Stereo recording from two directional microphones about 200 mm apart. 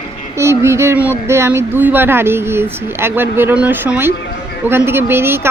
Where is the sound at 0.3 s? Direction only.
15° right (ahead or behind).